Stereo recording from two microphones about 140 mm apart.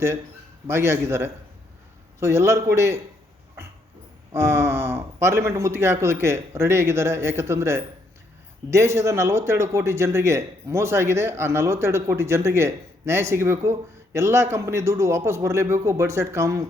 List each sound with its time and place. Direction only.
0.7 s a man's voice: 20° right (ahead or behind)
4.3 s speech: 20° right (ahead or behind)